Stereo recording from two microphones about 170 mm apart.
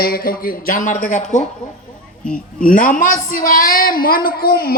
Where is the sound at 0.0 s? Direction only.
60° left (ahead or behind).